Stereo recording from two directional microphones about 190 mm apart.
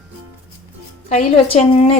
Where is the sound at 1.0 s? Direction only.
35° left (ahead or behind).